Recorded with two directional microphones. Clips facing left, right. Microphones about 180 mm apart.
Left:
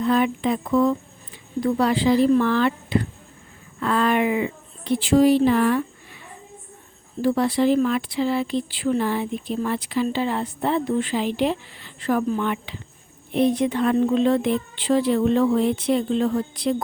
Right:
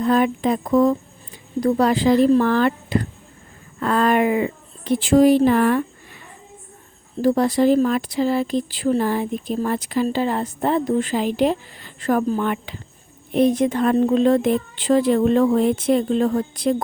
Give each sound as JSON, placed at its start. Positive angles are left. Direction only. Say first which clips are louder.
{"t": 0.0, "sound": "a woman's voice", "louder": "right 2 dB", "side_deg": -45}